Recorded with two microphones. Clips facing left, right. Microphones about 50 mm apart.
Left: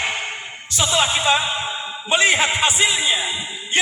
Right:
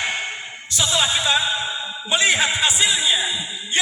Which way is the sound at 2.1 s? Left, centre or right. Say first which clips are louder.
Left 2 dB; left.